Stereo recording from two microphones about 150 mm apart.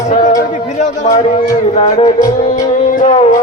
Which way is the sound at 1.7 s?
45° left (ahead or behind).